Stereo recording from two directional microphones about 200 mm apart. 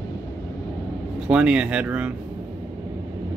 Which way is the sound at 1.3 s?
5° right (ahead or behind).